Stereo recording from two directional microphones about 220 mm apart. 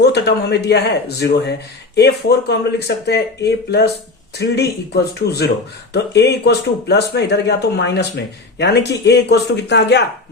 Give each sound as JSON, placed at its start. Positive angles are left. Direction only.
{"t": 0.0, "sound": "speech", "side_deg": 50}